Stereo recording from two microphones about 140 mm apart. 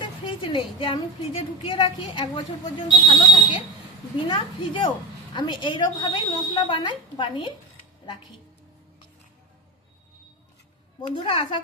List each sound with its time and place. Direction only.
0.0 s a woman's voice: 35° left (ahead or behind)
11.2 s a woman's voice: 35° left (ahead or behind)